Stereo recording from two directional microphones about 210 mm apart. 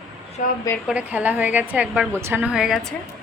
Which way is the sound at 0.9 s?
5° right (ahead or behind).